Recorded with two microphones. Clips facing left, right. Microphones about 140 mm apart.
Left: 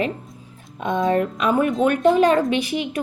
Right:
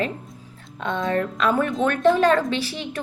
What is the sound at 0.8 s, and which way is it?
A woman's voice, 20° left (ahead or behind).